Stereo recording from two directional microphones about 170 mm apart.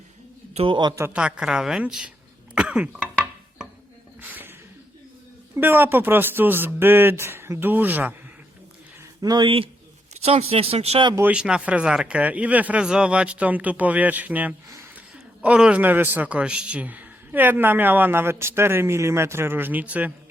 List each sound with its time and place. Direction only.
0.5 s a man's voice: 30° right (ahead or behind); by 2.1 s 5° right (ahead or behind)
2.6 s cough: 5° right (ahead or behind)
4.2 s a sound: 10° right (ahead or behind)
5.5 s a man's voice: 10° right (ahead or behind)
9.2 s speech: 25° right (ahead or behind)
11.1 s a man's voice: 10° right (ahead or behind)